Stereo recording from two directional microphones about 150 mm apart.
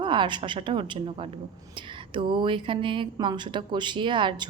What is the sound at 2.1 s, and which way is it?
A woman's voice, 35° right (ahead or behind).